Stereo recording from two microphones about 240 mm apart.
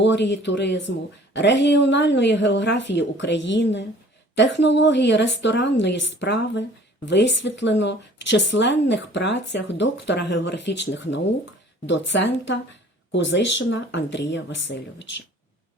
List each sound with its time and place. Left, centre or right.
0.0 s speech: left